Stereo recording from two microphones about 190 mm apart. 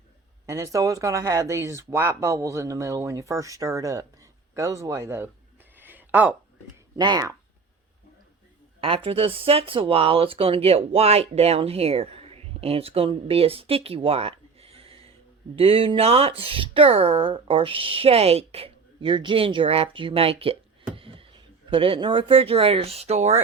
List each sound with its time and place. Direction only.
0.4 s speech: 15° right (ahead or behind)
5.7 s a sound: 10° right (ahead or behind)
6.9 s speech: 20° right (ahead or behind)
8.8 s a woman's voice: 30° right (ahead or behind)